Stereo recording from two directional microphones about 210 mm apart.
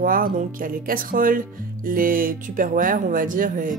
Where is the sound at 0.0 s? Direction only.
40° right (ahead or behind).